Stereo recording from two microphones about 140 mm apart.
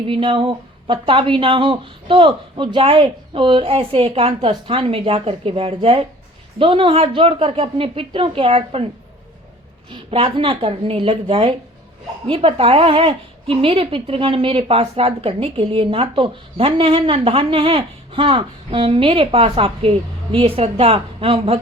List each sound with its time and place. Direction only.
0.1 s a woman's voice: 40° right (ahead or behind)
9.9 s a woman's voice: 40° right (ahead or behind)